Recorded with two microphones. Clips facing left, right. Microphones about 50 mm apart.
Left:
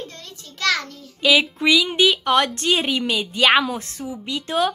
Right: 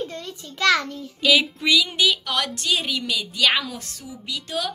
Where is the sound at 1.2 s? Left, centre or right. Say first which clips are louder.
Left 2 dB; centre.